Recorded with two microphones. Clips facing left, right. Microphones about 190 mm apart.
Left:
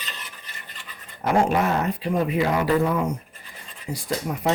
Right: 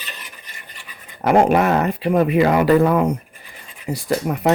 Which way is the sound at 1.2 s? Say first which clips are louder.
Right 6 dB; 65° right (ahead or behind).